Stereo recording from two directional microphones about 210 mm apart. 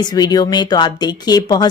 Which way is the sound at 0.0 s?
20° left (ahead or behind).